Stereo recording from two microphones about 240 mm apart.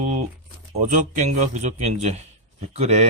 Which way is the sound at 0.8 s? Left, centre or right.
Right.